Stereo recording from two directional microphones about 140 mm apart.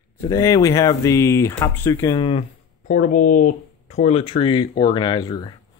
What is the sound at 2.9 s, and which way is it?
Speech, 70° left (ahead or behind).